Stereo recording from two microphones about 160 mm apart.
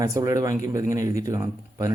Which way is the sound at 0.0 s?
20° right (ahead or behind).